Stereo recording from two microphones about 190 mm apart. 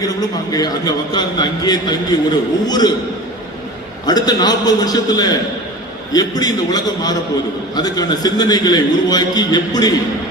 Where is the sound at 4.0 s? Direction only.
20° left (ahead or behind).